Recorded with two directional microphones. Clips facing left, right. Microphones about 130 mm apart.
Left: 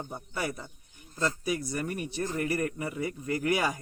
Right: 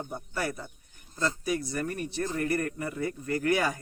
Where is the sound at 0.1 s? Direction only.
5° left (ahead or behind).